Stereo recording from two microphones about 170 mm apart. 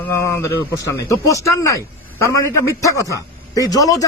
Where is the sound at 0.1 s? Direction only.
15° left (ahead or behind).